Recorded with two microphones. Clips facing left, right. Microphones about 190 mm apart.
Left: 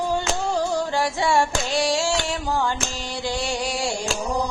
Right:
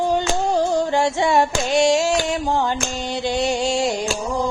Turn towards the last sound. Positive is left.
turn(degrees=-20)  # may be behind; listen again after turning